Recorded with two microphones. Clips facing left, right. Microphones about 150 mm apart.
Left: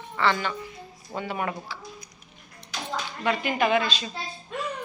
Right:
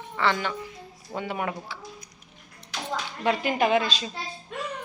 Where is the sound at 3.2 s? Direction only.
35° right (ahead or behind).